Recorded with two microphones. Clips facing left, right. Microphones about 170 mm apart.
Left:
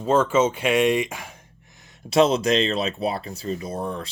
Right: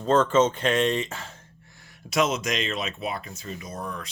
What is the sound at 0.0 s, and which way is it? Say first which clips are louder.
Speech: left 1 dB; 10° left (ahead or behind).